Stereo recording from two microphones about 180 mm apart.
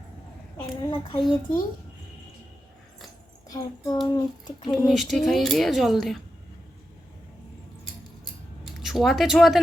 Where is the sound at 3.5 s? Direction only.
20° left (ahead or behind).